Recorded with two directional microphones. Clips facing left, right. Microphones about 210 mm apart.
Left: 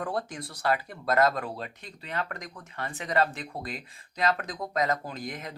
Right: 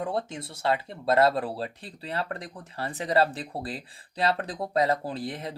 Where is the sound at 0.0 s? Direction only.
25° right (ahead or behind).